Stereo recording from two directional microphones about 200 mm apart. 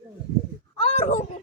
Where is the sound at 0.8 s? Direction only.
35° left (ahead or behind).